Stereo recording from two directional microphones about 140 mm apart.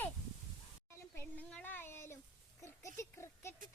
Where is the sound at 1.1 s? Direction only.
10° left (ahead or behind).